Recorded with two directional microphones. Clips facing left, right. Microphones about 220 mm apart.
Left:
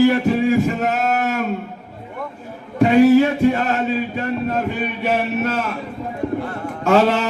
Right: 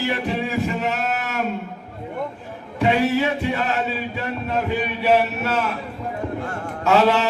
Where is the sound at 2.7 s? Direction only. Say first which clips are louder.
Left 8 dB; 45° left (ahead or behind).